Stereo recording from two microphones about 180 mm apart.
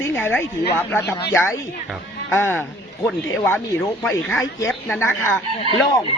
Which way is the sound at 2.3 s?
15° left (ahead or behind).